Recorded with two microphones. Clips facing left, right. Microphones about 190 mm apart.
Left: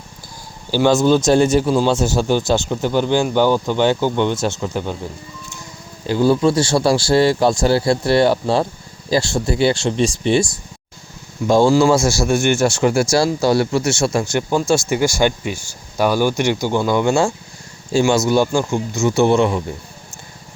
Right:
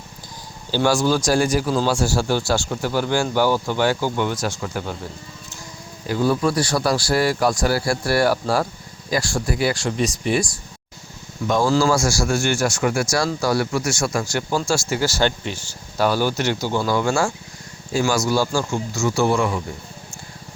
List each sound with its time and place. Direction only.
0.7 s speech: 20° left (ahead or behind)
6.1 s speech: 30° left (ahead or behind)